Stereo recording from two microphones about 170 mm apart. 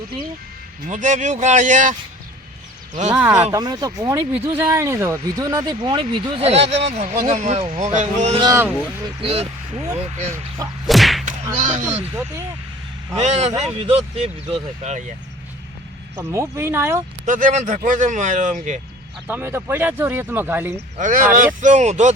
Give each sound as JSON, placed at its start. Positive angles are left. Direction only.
{"t": 0.9, "sound": "speech", "side_deg": -50}
{"t": 3.1, "sound": "speech", "side_deg": -10}
{"t": 3.5, "sound": "speech", "side_deg": -25}
{"t": 8.4, "sound": "speech", "side_deg": -15}
{"t": 9.2, "sound": "speech", "side_deg": -35}
{"t": 10.8, "sound": "whip", "side_deg": 0}
{"t": 11.3, "sound": "whip", "side_deg": -45}
{"t": 13.1, "sound": "speech", "side_deg": -40}
{"t": 16.1, "sound": "speech", "side_deg": -15}
{"t": 17.2, "sound": "speech", "side_deg": -50}
{"t": 19.3, "sound": "speech", "side_deg": -15}
{"t": 21.0, "sound": "speech", "side_deg": -50}